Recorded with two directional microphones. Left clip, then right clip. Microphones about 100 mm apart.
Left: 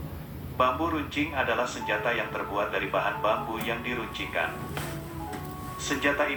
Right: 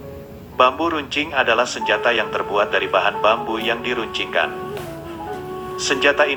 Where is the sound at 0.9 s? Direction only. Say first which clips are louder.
Right 9 dB; 45° right (ahead or behind).